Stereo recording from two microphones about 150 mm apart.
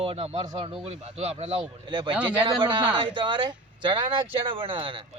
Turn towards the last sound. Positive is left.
turn(degrees=-35)  # may be behind; listen again after turning